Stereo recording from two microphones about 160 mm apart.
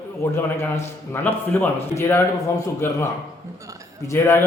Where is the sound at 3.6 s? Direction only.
20° right (ahead or behind).